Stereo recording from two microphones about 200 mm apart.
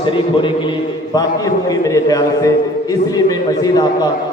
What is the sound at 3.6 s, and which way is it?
Speech, 20° left (ahead or behind).